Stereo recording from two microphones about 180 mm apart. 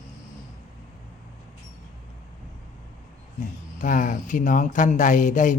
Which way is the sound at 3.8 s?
50° left (ahead or behind).